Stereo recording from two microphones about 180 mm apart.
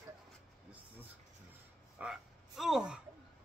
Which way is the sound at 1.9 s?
Centre (ahead or behind).